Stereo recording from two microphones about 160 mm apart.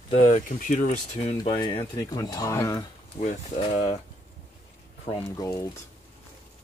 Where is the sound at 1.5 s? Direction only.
25° left (ahead or behind).